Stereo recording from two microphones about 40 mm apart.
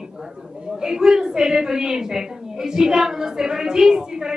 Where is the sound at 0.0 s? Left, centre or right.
Centre.